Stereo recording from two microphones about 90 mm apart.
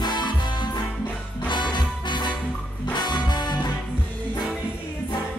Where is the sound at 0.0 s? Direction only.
55° left (ahead or behind).